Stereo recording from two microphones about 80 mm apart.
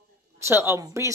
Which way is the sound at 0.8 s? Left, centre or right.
Right.